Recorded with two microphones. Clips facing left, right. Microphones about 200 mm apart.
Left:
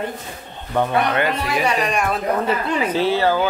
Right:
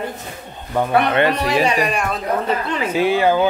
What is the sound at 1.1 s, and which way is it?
Speech, 30° right (ahead or behind).